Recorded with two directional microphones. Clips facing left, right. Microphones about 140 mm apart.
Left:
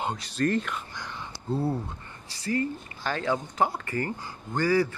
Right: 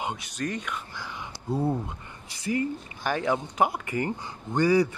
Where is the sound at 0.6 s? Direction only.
5° right (ahead or behind).